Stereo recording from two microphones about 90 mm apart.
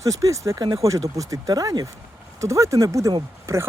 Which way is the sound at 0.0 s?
40° right (ahead or behind).